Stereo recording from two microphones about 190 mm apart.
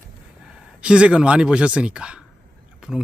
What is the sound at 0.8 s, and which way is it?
A man's voice, 5° right (ahead or behind).